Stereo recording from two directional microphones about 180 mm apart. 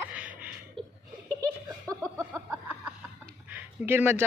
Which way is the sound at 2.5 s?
10° right (ahead or behind).